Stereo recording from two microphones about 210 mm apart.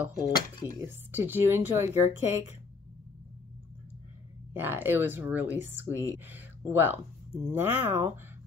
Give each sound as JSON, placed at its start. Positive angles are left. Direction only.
{"t": 0.3, "sound": "speech", "side_deg": 20}
{"t": 0.8, "sound": "speech", "side_deg": -10}
{"t": 4.6, "sound": "speech", "side_deg": -10}